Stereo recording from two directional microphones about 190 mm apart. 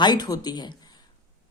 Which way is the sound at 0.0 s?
20° left (ahead or behind).